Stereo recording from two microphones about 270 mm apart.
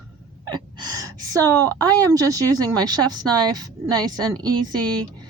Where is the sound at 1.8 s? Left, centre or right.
Centre.